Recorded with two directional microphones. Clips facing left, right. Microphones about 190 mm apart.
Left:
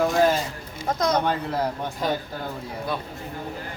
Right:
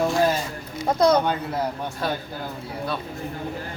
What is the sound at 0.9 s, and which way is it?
Speech, 30° right (ahead or behind).